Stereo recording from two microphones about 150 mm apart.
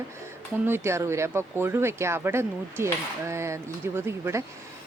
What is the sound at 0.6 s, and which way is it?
Speech, 15° right (ahead or behind).